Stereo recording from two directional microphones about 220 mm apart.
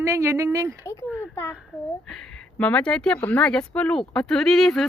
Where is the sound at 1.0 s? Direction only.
10° right (ahead or behind).